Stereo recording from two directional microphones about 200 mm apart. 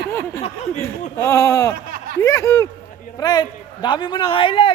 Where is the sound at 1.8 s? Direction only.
45° right (ahead or behind).